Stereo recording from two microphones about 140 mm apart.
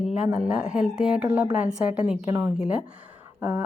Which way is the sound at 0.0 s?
5° right (ahead or behind).